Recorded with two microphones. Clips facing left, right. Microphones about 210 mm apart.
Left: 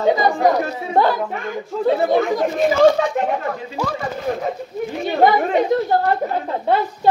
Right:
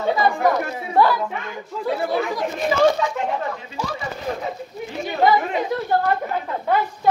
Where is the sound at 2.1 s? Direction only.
45° left (ahead or behind).